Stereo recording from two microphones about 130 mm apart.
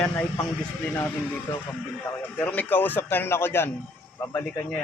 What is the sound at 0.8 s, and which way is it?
Speech, 15° left (ahead or behind).